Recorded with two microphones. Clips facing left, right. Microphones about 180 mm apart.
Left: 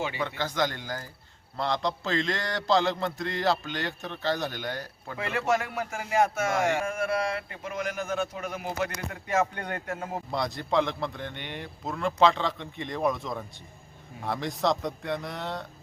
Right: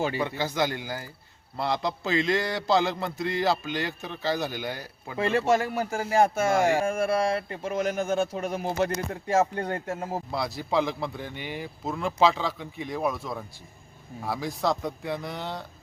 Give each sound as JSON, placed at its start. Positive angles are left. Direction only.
{"t": 0.2, "sound": "a man's voice", "side_deg": -10}
{"t": 5.1, "sound": "speech", "side_deg": -30}
{"t": 10.3, "sound": "a man's voice", "side_deg": -5}